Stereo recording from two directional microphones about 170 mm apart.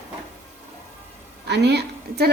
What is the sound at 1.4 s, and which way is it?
Speech, 80° right.